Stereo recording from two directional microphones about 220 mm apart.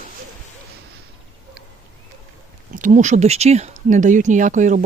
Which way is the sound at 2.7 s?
35° right (ahead or behind).